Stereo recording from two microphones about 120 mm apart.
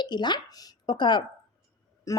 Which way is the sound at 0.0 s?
40° left (ahead or behind).